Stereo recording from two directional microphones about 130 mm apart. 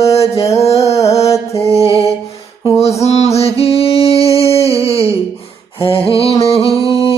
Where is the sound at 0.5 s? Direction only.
55° left (ahead or behind).